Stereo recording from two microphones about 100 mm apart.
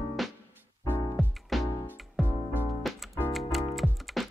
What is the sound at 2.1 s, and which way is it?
Music, 20° right (ahead or behind).